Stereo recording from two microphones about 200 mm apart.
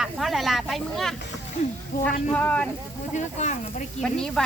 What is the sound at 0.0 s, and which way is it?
Speech, centre (ahead or behind).